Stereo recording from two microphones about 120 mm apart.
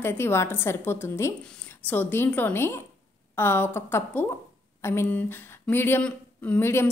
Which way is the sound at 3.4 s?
20° left (ahead or behind).